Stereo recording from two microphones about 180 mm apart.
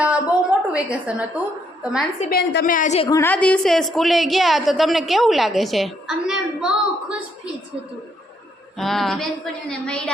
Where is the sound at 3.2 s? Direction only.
10° left (ahead or behind).